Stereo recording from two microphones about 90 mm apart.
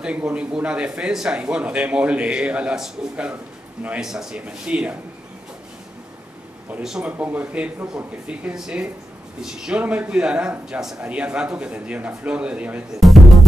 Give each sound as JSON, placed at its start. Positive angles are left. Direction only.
{"t": 0.0, "sound": "speech", "side_deg": -15}
{"t": 6.8, "sound": "speech", "side_deg": -5}
{"t": 7.1, "sound": "speech", "side_deg": -15}
{"t": 13.0, "sound": "music", "side_deg": 0}